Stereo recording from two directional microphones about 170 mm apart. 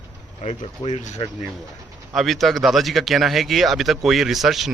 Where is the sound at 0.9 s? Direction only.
45° left (ahead or behind).